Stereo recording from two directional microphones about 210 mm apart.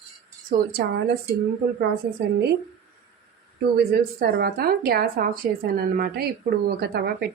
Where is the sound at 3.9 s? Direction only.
45° right (ahead or behind).